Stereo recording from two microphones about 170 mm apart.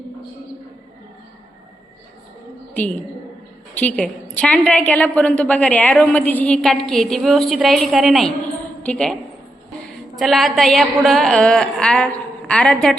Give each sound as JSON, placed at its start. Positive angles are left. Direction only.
{"t": 3.8, "sound": "a woman's voice", "side_deg": 10}
{"t": 10.2, "sound": "a woman's voice", "side_deg": 0}